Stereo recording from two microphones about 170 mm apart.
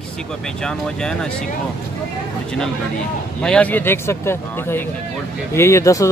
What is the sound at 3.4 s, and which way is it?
A man's voice, 5° left (ahead or behind).